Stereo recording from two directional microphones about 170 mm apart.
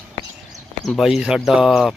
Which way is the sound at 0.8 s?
Centre (ahead or behind).